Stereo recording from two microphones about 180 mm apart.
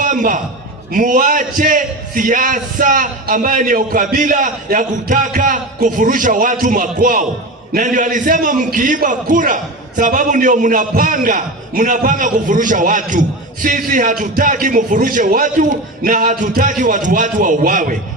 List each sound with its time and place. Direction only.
0.0 s a man's voice: 45° right (ahead or behind)